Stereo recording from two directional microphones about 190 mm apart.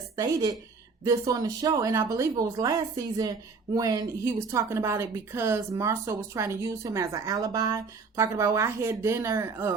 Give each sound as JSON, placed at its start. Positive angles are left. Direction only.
{"t": 0.2, "sound": "a woman's voice", "side_deg": -15}